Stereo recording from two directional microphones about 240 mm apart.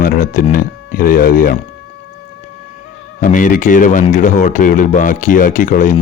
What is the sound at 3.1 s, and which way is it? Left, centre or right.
Speech, left.